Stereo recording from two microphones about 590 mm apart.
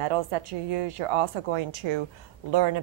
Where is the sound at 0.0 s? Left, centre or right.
Right.